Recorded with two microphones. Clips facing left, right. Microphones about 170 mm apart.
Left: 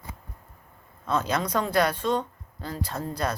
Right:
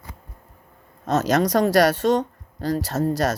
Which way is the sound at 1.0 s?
80° right.